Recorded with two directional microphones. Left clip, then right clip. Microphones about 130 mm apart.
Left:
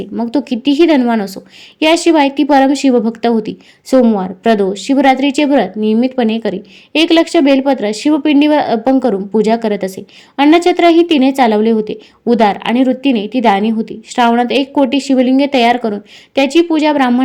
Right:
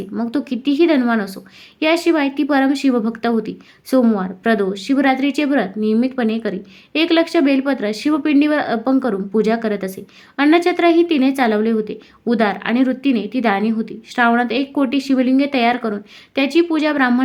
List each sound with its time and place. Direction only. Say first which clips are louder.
0.2 s a woman's voice: left 6 dB; 20° left (ahead or behind)